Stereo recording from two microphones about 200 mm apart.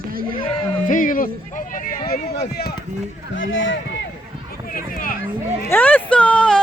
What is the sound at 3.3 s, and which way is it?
Speech, 70° left (ahead or behind).